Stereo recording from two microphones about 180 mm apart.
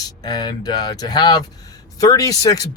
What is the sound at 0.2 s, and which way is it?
Speech, 20° left (ahead or behind).